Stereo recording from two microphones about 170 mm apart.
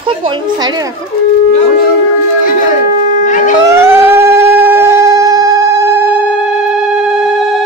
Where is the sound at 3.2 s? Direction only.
50° left (ahead or behind).